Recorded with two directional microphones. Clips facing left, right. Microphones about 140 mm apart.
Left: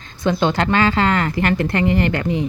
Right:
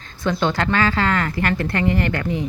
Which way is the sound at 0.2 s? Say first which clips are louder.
Left 3 dB; 15° left (ahead or behind).